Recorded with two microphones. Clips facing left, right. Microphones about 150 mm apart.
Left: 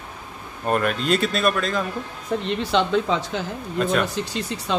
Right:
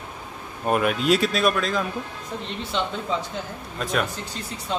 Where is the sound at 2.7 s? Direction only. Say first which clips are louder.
Left 6 dB; 90° left.